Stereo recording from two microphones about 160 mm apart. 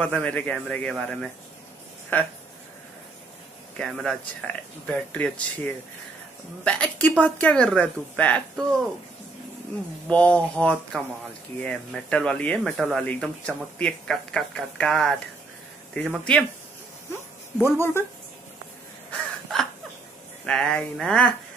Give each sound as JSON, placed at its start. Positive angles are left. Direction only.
{"t": 0.0, "sound": "a woman's voice", "side_deg": 10}
{"t": 3.7, "sound": "a woman's voice", "side_deg": 5}
{"t": 10.0, "sound": "a woman's voice", "side_deg": 10}
{"t": 17.6, "sound": "a woman's voice", "side_deg": 15}
{"t": 19.0, "sound": "crow", "side_deg": 0}
{"t": 20.4, "sound": "speech", "side_deg": 5}